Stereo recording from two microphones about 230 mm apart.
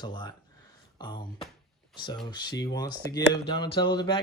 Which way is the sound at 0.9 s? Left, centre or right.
Centre.